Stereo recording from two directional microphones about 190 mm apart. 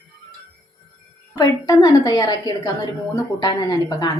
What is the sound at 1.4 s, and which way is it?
A woman's voice, 20° left (ahead or behind).